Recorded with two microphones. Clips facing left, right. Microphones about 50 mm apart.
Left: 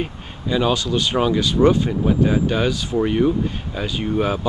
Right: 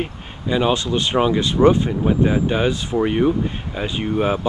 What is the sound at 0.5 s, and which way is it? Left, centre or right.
Speech, right.